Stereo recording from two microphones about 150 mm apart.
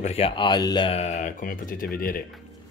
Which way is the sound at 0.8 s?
50° left (ahead or behind).